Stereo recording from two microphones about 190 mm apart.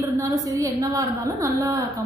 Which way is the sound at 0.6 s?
15° right (ahead or behind).